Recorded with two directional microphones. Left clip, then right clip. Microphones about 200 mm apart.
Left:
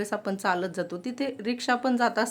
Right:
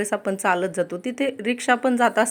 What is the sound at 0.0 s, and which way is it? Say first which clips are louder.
A woman's voice: right 6 dB; 10° right (ahead or behind).